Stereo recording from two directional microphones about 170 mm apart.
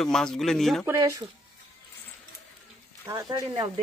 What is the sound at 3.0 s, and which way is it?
Speech, 20° right (ahead or behind).